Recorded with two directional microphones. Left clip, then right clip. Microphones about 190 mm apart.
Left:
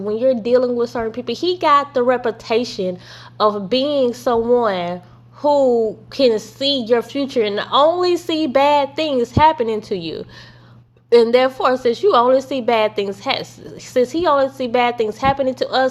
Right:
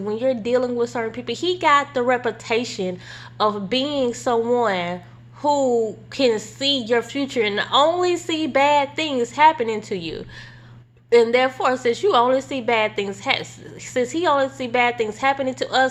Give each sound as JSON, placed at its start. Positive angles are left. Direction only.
{"t": 0.0, "sound": "a woman's voice", "side_deg": 20}